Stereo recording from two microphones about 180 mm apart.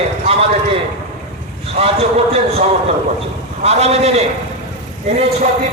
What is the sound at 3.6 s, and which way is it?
Speech, 35° right (ahead or behind).